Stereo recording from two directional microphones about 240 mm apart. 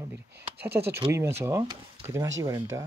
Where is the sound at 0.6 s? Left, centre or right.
Right.